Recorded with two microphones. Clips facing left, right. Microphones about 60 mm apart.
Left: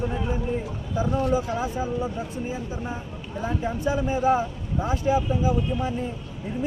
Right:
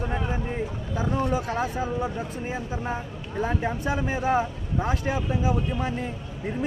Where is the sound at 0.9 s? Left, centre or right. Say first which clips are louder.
Left 3 dB; right.